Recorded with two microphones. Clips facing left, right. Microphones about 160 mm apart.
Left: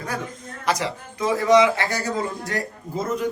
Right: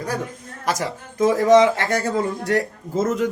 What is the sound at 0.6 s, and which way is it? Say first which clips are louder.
A man's voice: even; 45° right (ahead or behind).